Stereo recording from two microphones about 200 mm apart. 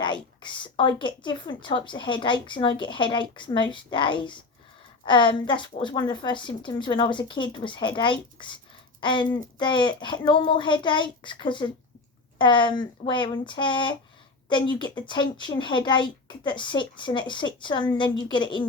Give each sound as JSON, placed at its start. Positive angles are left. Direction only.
{"t": 0.0, "sound": "a woman's voice", "side_deg": 25}